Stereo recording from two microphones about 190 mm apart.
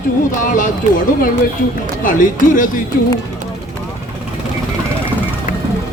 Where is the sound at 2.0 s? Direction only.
45° left (ahead or behind).